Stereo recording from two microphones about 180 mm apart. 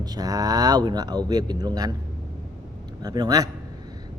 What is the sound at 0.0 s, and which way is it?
Speech, 20° right (ahead or behind).